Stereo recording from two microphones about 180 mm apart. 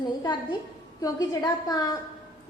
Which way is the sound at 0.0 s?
25° left (ahead or behind).